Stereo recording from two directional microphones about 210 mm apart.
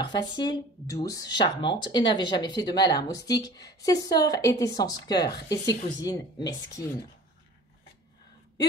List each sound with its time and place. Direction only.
0.0 s a woman's voice: 20° left (ahead or behind)